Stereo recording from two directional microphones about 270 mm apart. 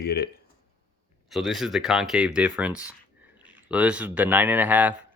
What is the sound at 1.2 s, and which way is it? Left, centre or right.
Speech, centre.